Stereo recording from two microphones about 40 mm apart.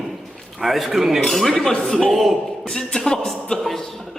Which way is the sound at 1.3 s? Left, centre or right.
Centre.